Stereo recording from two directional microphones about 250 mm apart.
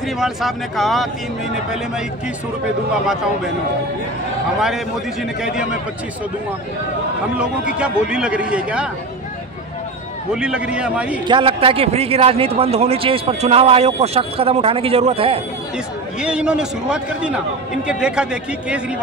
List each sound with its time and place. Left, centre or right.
0.2 s a man's voice: centre
4.6 s a man's voice: centre
7.7 s a man's voice: centre
10.3 s a man's voice: centre
11.2 s a man's voice: right
16.2 s a man's voice: centre